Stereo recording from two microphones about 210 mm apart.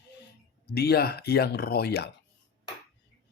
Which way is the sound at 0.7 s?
50° left (ahead or behind).